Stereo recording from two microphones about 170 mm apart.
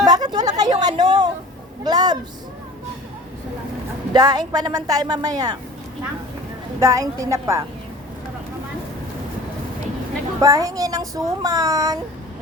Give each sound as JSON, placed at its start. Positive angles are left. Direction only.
{"t": 0.0, "sound": "a sound", "side_deg": -25}
{"t": 1.8, "sound": "speech", "side_deg": -25}
{"t": 4.1, "sound": "speech", "side_deg": -20}
{"t": 6.7, "sound": "a woman's voice", "side_deg": -20}
{"t": 10.4, "sound": "speech", "side_deg": -20}